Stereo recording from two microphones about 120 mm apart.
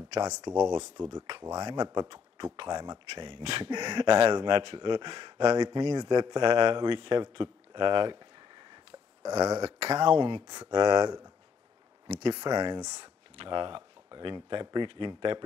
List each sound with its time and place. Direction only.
0.2 s speech: 30° right (ahead or behind)
3.4 s speech: 55° right (ahead or behind)
3.7 s speech: 35° right (ahead or behind)
9.4 s speech: 30° right (ahead or behind)
9.7 s speech: 60° right (ahead or behind)
10.0 s speech: 45° right (ahead or behind)
10.4 s speech: 35° right (ahead or behind)
12.1 s speech: 60° right (ahead or behind)
12.4 s speech: 30° right (ahead or behind)
13.4 s speech: 45° right (ahead or behind)